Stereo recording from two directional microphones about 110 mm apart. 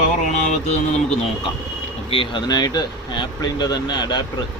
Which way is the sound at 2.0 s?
55° left (ahead or behind).